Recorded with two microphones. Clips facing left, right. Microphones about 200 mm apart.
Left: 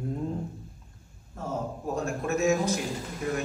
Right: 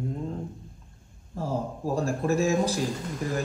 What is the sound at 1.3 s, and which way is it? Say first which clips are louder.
A man's voice: right 3 dB; 30° right (ahead or behind).